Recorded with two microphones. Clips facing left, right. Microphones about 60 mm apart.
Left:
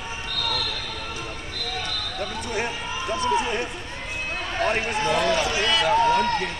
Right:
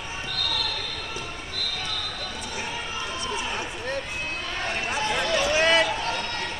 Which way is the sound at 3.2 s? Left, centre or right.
Left.